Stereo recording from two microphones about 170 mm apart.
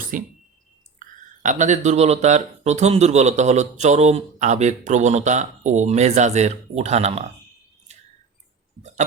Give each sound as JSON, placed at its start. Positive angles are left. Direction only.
{"t": 0.1, "sound": "speech", "side_deg": -50}